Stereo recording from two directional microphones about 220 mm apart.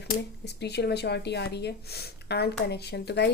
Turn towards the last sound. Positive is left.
turn(degrees=50)  # may be behind; listen again after turning